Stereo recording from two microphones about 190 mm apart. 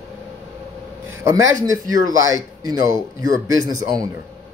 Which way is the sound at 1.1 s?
15° right (ahead or behind).